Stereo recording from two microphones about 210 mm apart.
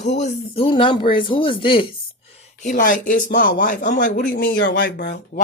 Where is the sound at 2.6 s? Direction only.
35° left (ahead or behind); by 5.4 s 55° left (ahead or behind).